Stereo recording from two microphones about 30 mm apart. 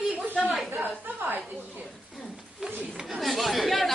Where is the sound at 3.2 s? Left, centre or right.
Centre.